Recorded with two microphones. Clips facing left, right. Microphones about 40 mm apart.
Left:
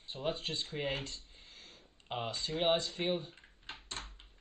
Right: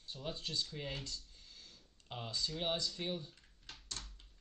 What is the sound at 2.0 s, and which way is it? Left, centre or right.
Speech, left.